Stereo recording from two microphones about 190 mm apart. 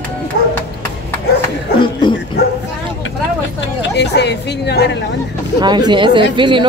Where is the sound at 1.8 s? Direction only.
25° left (ahead or behind).